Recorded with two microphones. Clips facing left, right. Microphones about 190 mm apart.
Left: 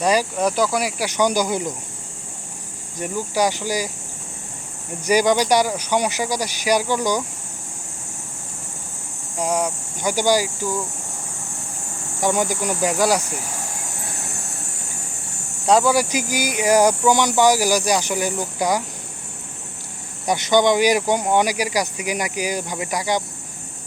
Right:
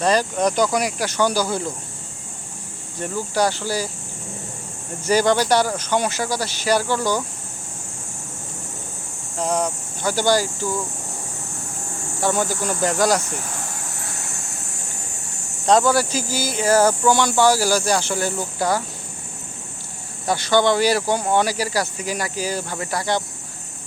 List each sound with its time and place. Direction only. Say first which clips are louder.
0.0 s speech: even; 10° left (ahead or behind)
3.0 s speech: even; 10° left (ahead or behind)
5.0 s speech: even; 10° left (ahead or behind)
9.4 s speech: even; 10° left (ahead or behind)
12.2 s speech: left 1 dB; 15° left (ahead or behind)
15.6 s speech: even; 5° left (ahead or behind)
20.2 s speech: left 1 dB; 15° left (ahead or behind)